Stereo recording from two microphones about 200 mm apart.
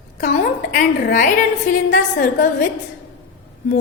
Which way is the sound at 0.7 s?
40° left (ahead or behind).